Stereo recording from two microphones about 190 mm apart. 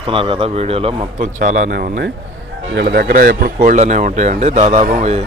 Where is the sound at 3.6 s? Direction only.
35° right (ahead or behind).